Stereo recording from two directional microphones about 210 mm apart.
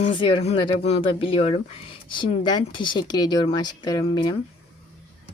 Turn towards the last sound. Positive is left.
turn(degrees=20)  # may be behind; listen again after turning